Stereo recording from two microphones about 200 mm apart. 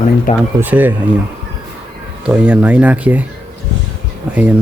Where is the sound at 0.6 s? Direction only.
10° right (ahead or behind).